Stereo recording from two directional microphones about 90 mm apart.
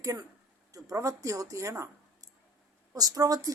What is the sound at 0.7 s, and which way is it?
A woman's voice, 40° right (ahead or behind).